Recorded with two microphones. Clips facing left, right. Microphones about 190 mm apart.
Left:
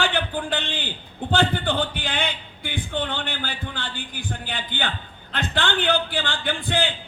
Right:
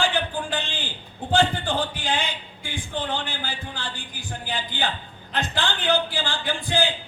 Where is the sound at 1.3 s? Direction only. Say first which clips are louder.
Even; 60° left (ahead or behind).